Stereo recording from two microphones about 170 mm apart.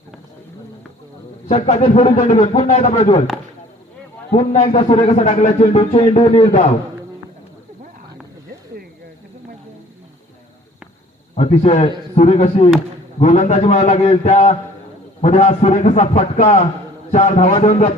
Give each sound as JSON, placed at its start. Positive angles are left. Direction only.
{"t": 1.5, "sound": "speech", "side_deg": 40}
{"t": 4.4, "sound": "speech", "side_deg": 40}
{"t": 11.3, "sound": "speech", "side_deg": 35}